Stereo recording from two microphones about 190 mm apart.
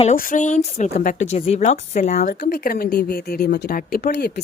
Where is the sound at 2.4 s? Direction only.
55° left (ahead or behind).